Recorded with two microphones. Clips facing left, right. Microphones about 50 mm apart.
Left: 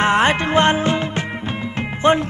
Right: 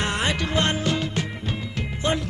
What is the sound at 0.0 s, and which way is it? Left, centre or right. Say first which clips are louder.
Music: left 9 dB; left.